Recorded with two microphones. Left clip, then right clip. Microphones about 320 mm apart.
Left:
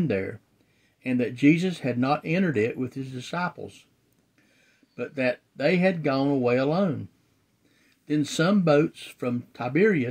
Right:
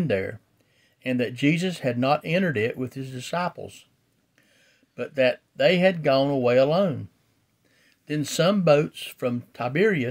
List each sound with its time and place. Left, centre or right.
0.0 s speech: right
4.9 s speech: right
8.1 s speech: right